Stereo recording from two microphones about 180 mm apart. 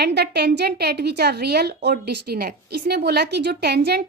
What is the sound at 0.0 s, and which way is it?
A woman's voice, 65° right (ahead or behind).